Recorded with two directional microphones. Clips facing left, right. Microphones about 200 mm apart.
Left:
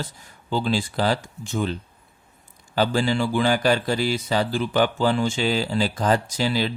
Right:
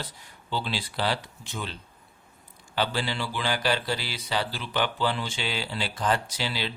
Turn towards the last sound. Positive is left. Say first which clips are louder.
# left 8 dB
turn(degrees=45)  # may be behind; listen again after turning